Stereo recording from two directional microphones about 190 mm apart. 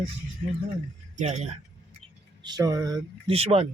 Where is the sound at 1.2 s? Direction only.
35° right (ahead or behind).